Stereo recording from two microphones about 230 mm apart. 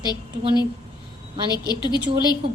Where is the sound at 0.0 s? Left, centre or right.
Centre.